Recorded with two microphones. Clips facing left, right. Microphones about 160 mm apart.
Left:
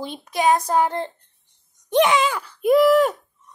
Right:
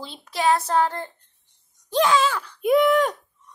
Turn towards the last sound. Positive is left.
turn(degrees=0)  # may be behind; listen again after turning